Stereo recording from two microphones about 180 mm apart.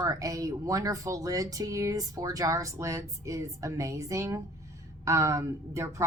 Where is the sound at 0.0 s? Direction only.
20° right (ahead or behind).